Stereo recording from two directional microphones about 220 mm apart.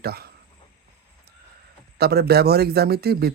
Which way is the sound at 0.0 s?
45° right (ahead or behind).